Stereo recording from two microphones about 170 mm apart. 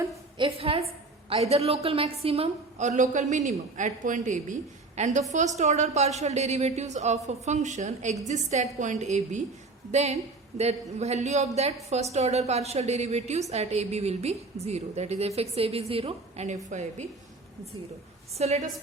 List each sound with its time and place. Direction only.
0.3 s a woman's voice: 30° right (ahead or behind)
18.3 s a woman's voice: 40° right (ahead or behind)